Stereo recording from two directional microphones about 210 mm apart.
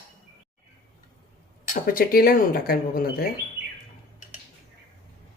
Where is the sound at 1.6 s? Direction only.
40° left (ahead or behind).